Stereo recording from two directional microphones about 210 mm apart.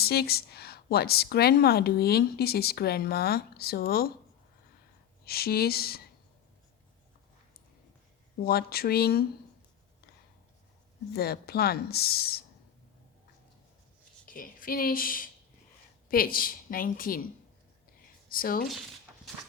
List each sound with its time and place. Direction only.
0.0 s a woman's voice: 50° left (ahead or behind)
5.2 s a woman's voice: 45° left (ahead or behind)
8.4 s a woman's voice: 45° left (ahead or behind)
11.1 s a woman's voice: 50° left (ahead or behind)
14.3 s a woman's voice: 40° left (ahead or behind)
18.3 s speech: 45° left (ahead or behind)